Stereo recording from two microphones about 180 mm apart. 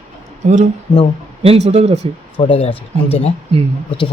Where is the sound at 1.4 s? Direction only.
35° right (ahead or behind).